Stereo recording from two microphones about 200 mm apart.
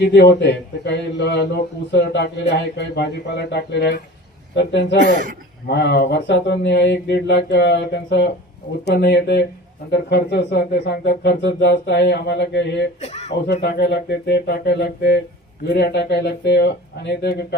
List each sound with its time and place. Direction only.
0.0 s a man's voice: 60° left (ahead or behind)
13.0 s speech: 35° left (ahead or behind)
13.5 s a man's voice: 55° left (ahead or behind)